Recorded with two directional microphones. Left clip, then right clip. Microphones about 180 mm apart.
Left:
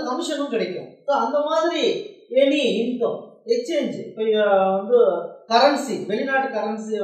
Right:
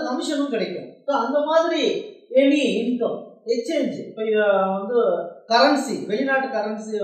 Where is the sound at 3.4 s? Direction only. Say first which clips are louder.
Left 1 dB; 15° right (ahead or behind).